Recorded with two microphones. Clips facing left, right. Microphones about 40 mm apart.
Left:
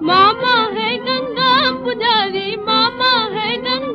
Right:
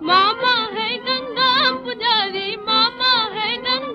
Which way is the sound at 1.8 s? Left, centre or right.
Left.